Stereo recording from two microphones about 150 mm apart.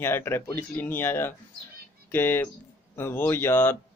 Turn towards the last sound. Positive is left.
turn(degrees=15)  # may be behind; listen again after turning